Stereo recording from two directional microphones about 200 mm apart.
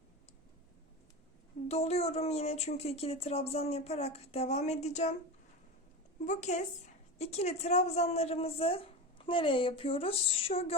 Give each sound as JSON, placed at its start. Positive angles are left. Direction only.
{"t": 1.6, "sound": "speech", "side_deg": 30}
{"t": 6.2, "sound": "a woman's voice", "side_deg": 35}